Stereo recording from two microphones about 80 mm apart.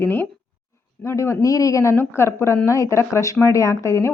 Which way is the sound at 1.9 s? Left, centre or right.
Left.